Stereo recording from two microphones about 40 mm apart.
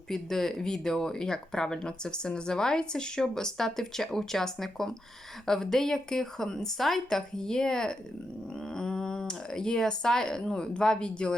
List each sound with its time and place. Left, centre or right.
0.1 s speech: centre; by 11.3 s left